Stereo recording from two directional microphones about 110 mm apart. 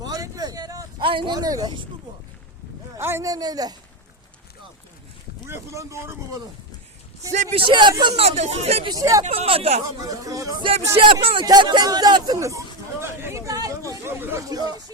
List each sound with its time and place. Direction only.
0.0 s a sound: 35° right (ahead or behind)
0.9 s speech: 50° right (ahead or behind)
1.4 s speech: 35° right (ahead or behind)
3.0 s speech: 25° right (ahead or behind)
5.5 s speech: 25° right (ahead or behind)
7.5 s speech: 45° right (ahead or behind)
8.1 s speech: 70° right (ahead or behind)
8.8 s speech: 35° right (ahead or behind)
9.2 s speech: 70° right (ahead or behind)
10.0 s speech: 30° right (ahead or behind)
10.9 s speech: 55° right (ahead or behind)
11.4 s a sound: 40° right (ahead or behind)
14.2 s speech: 20° right (ahead or behind)
14.5 s speech: 35° right (ahead or behind)